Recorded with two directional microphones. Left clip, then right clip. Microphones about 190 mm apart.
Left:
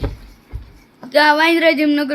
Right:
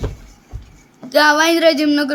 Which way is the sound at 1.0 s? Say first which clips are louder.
Even; 20° right (ahead or behind).